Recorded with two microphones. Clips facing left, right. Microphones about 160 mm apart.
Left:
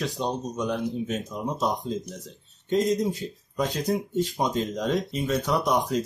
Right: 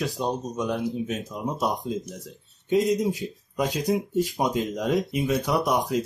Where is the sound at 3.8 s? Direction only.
5° right (ahead or behind).